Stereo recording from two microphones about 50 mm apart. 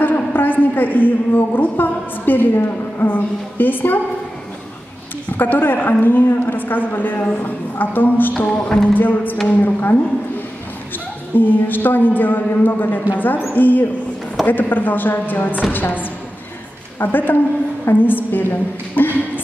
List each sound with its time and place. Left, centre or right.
0.0 s a woman's voice: left
5.4 s a woman's voice: left
8.5 s music: centre
8.8 s a woman's voice: left
11.3 s a woman's voice: left